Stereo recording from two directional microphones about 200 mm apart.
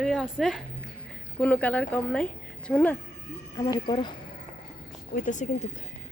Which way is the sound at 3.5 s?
20° left (ahead or behind).